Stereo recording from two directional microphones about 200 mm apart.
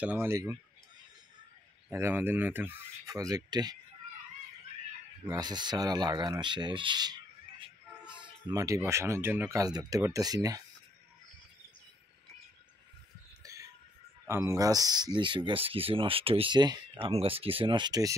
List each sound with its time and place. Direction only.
0.0 s speech: 10° right (ahead or behind)
1.9 s speech: 10° right (ahead or behind)
5.3 s speech: 20° right (ahead or behind)
13.4 s music: 15° right (ahead or behind)
14.2 s speech: 15° right (ahead or behind)